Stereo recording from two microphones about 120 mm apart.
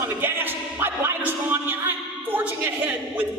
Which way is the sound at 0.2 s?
15° right (ahead or behind).